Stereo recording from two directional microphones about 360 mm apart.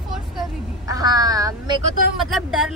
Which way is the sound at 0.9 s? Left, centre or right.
Centre.